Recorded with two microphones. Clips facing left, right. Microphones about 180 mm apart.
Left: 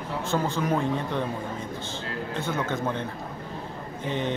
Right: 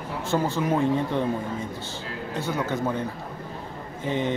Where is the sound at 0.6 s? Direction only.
5° right (ahead or behind).